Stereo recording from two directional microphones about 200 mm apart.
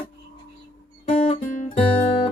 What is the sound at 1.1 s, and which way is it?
Guitar, 35° left (ahead or behind).